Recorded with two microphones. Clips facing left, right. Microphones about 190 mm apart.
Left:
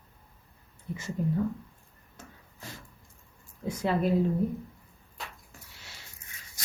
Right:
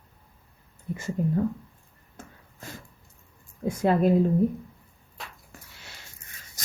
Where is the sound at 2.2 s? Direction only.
55° right (ahead or behind).